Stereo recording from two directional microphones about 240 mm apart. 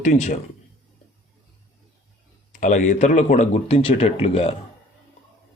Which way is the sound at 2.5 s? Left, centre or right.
Left.